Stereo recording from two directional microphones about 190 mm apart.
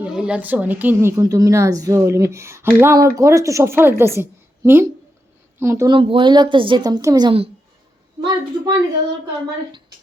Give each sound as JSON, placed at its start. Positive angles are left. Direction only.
{"t": 0.0, "sound": "a woman's voice", "side_deg": -5}
{"t": 6.0, "sound": "a woman's voice", "side_deg": -25}